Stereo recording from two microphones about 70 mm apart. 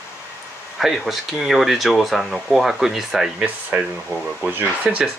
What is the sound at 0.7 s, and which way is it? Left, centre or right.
Speech, centre.